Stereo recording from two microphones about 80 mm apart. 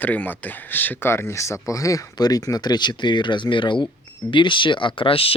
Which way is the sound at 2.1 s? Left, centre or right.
Left.